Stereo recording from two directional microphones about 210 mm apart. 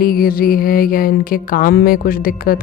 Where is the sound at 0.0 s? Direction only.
45° left (ahead or behind).